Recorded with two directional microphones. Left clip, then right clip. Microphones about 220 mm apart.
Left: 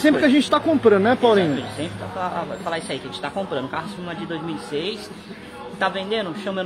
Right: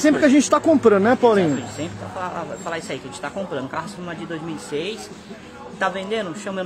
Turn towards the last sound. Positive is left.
turn(degrees=0)  # may be behind; listen again after turning